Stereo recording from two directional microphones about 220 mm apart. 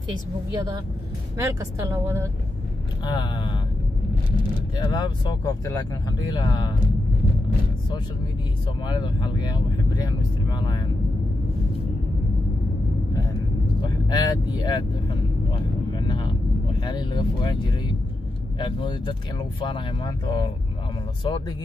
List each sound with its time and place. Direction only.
1.4 s a woman's voice: 15° right (ahead or behind)
3.1 s speech: 20° left (ahead or behind)
4.8 s speech: 20° left (ahead or behind)
8.8 s speech: 20° left (ahead or behind)
13.7 s vehicle: 20° left (ahead or behind)
16.8 s speech: 20° left (ahead or behind)